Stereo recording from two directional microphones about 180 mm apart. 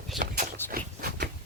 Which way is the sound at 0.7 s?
55° right (ahead or behind).